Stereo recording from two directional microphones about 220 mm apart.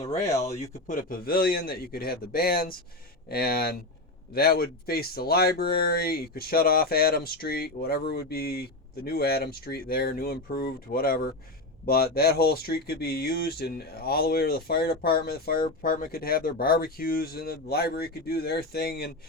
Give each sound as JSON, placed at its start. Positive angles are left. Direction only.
{"t": 0.0, "sound": "speech", "side_deg": 30}